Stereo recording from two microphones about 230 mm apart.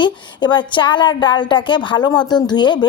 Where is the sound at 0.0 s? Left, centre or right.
Centre.